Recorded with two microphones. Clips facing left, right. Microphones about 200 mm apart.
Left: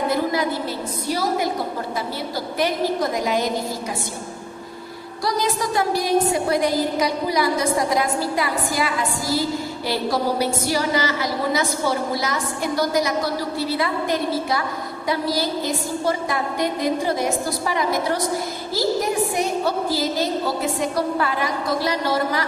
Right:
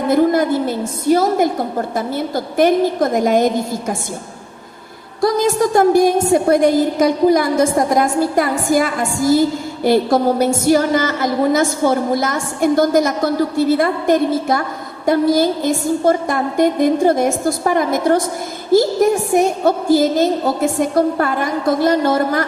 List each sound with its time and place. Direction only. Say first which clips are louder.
0.1 s a woman's voice: right 8 dB; 50° right (ahead or behind)
5.2 s a woman's voice: right 8 dB; 50° right (ahead or behind)